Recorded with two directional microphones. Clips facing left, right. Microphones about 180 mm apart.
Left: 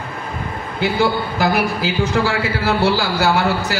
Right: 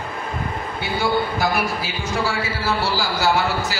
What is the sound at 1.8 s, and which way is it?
A man's voice, 70° left (ahead or behind).